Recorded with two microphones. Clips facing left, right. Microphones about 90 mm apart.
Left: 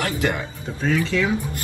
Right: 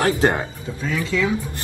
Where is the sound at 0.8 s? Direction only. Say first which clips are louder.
Left 1 dB; 40° left (ahead or behind).